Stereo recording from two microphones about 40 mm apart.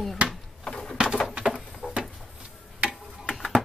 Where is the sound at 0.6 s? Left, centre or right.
Centre.